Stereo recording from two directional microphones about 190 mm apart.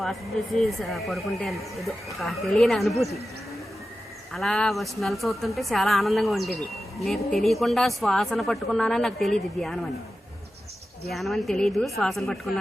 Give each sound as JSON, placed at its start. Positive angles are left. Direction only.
{"t": 0.8, "sound": "speech", "side_deg": 0}
{"t": 4.3, "sound": "speech", "side_deg": 0}
{"t": 11.1, "sound": "speech", "side_deg": 0}